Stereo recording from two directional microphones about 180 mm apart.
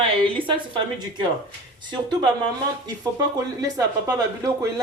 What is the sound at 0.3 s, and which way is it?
Speech, 30° right (ahead or behind).